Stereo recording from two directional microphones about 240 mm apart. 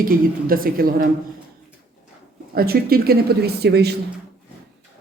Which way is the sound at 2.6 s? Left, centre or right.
Right.